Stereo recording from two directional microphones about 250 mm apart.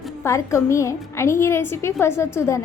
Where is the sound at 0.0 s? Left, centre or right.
Centre.